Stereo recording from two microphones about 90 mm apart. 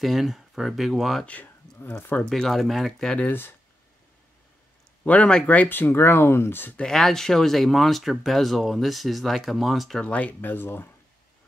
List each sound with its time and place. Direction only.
0.0 s speech: centre (ahead or behind)
1.2 s speech: 15° left (ahead or behind)
1.9 s speech: 25° left (ahead or behind)
2.2 s speech: 5° left (ahead or behind)
3.3 s speech: 25° left (ahead or behind)
5.0 s speech: 15° left (ahead or behind)
6.8 s speech: 5° left (ahead or behind)
10.0 s speech: 15° left (ahead or behind)